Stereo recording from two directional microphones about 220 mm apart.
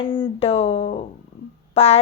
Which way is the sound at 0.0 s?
20° left (ahead or behind).